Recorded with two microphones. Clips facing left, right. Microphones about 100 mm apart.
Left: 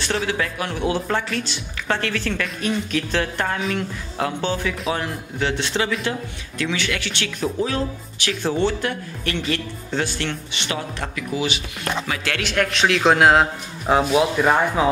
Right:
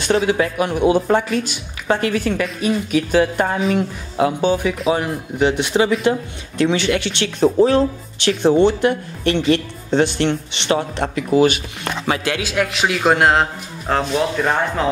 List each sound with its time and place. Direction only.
0.0 s speech: 15° right (ahead or behind)
7.2 s speech: 35° right (ahead or behind)
8.4 s speech: 20° right (ahead or behind)
11.3 s speech: 50° right (ahead or behind)
12.4 s speech: 5° right (ahead or behind)